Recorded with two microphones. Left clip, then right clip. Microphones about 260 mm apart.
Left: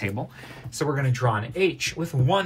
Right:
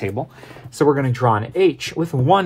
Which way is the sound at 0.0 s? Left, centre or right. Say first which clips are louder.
Right 6 dB; right.